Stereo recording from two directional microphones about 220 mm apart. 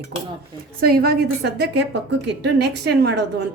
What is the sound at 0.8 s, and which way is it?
A woman's voice, 45° right (ahead or behind).